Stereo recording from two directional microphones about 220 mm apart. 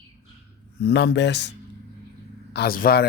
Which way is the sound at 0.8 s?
50° left (ahead or behind).